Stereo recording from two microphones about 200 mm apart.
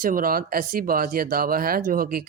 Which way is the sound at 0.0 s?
45° right (ahead or behind).